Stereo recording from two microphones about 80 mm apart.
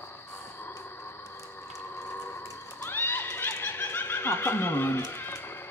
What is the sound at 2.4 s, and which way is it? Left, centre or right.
Horse, left.